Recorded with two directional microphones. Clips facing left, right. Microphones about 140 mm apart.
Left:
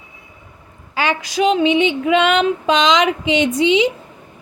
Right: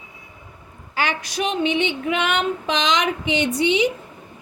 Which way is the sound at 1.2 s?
90° left.